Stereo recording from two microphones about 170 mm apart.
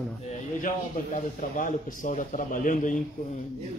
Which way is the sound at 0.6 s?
50° left (ahead or behind).